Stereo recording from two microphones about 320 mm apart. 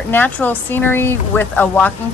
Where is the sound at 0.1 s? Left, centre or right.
Centre.